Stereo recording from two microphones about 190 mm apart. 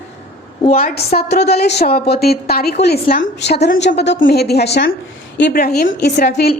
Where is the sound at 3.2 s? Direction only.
65° left (ahead or behind).